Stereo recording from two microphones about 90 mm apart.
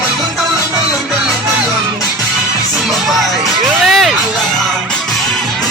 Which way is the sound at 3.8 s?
Centre (ahead or behind).